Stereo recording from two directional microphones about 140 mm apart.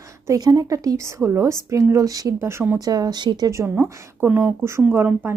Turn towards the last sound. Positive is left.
turn(degrees=-15)  # may be behind; listen again after turning